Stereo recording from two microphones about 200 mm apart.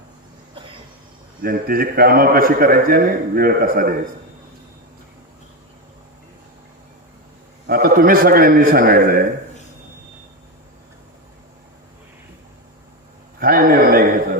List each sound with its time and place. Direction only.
1.4 s a man's voice: 45° right (ahead or behind)
7.7 s a man's voice: 45° right (ahead or behind)
13.4 s a man's voice: 45° right (ahead or behind)